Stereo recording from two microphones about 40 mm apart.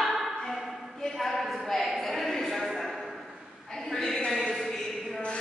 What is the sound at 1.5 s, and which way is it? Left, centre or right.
A woman's voice, centre.